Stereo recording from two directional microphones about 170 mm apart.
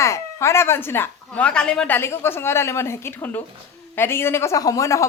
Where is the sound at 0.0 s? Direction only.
15° left (ahead or behind).